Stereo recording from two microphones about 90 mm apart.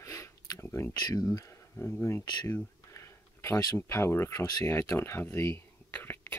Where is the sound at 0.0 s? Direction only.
35° left (ahead or behind).